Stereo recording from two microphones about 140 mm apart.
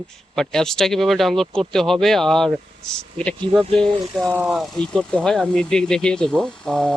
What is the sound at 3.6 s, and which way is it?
Speech, 40° right (ahead or behind).